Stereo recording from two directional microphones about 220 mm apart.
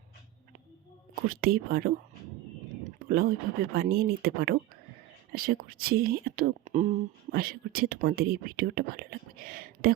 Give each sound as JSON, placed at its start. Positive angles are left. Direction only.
{"t": 1.3, "sound": "speech", "side_deg": -40}